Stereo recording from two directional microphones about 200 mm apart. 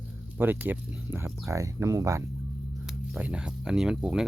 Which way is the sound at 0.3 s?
10° right (ahead or behind).